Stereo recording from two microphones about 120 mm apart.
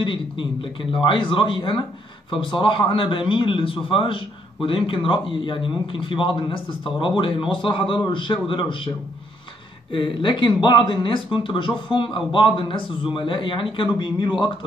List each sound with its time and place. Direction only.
0.0 s a man's voice: 45° left (ahead or behind)
9.9 s a man's voice: 40° left (ahead or behind)